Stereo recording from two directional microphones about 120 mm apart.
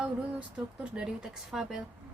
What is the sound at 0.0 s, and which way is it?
Speech, 10° right (ahead or behind).